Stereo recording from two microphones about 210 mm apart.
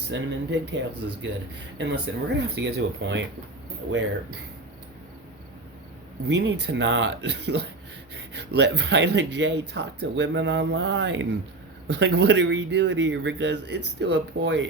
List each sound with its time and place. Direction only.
0.1 s speech: 60° right (ahead or behind)
6.2 s speech: 55° right (ahead or behind)